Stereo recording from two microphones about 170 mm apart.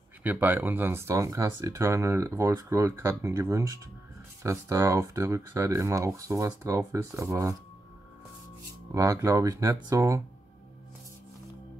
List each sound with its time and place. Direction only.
0.2 s speech: 10° right (ahead or behind)
8.9 s speech: 20° right (ahead or behind)